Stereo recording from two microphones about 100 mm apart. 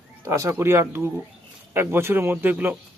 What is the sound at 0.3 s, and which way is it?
Speech, 30° right (ahead or behind).